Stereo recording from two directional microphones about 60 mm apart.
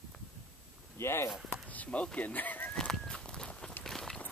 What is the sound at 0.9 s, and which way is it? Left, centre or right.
Chop, left.